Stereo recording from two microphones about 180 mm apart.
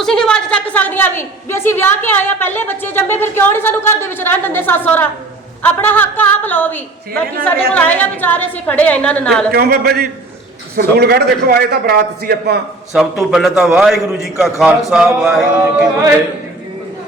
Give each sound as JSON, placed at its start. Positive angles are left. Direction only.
{"t": 0.0, "sound": "a woman's voice", "side_deg": 5}
{"t": 9.5, "sound": "a man's voice", "side_deg": -60}
{"t": 12.9, "sound": "a man's voice", "side_deg": 0}